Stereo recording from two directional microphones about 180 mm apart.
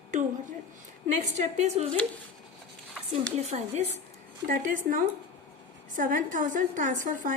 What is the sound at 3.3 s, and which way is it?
Speech, 40° right (ahead or behind).